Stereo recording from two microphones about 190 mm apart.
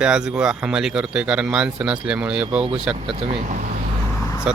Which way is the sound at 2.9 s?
30° right (ahead or behind).